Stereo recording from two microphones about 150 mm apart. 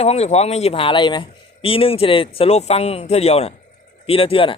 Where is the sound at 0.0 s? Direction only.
45° left (ahead or behind).